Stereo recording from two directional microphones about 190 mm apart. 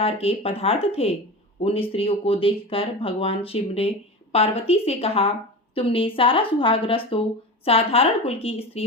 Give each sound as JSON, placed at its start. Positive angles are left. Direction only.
{"t": 0.0, "sound": "a woman's voice", "side_deg": 30}